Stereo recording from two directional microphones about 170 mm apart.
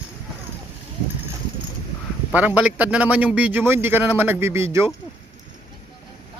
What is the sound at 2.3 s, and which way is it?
A man's voice, 10° right (ahead or behind).